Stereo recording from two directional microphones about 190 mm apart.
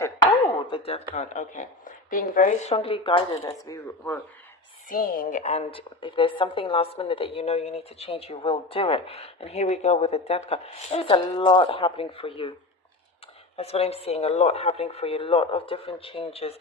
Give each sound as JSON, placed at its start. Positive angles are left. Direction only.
{"t": 0.7, "sound": "a sound", "side_deg": 30}
{"t": 1.1, "sound": "a woman's voice", "side_deg": 35}
{"t": 4.9, "sound": "a woman's voice", "side_deg": 50}
{"t": 13.6, "sound": "a woman's voice", "side_deg": 30}